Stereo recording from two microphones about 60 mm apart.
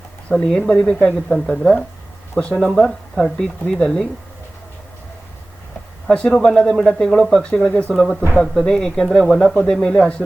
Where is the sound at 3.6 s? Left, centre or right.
Centre.